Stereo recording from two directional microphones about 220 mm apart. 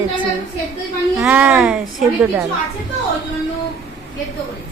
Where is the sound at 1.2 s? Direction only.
5° right (ahead or behind).